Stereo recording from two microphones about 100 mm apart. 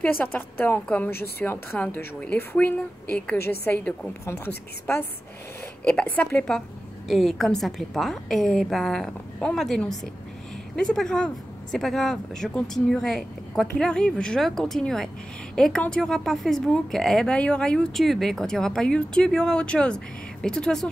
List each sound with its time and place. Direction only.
0.0 s a woman's voice: 15° left (ahead or behind)
5.9 s a woman's voice: 10° left (ahead or behind)